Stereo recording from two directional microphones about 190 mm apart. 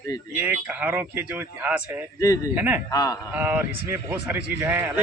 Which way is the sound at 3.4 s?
10° right (ahead or behind).